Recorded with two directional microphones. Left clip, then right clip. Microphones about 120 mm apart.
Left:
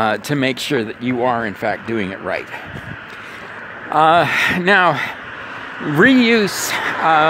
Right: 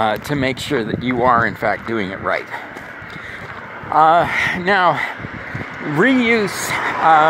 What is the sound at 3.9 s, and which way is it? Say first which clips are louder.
Speech: even; 65° left (ahead or behind).